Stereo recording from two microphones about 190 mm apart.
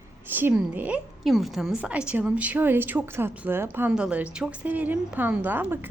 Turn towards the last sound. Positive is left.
turn(degrees=-10)  # may be behind; listen again after turning